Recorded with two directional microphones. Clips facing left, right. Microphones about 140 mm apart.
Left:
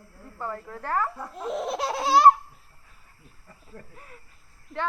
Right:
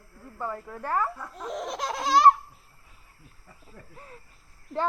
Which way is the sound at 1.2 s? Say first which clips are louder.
Left 4 dB; 5° left (ahead or behind).